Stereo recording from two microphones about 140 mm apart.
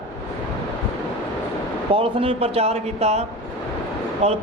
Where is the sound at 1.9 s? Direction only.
40° right (ahead or behind).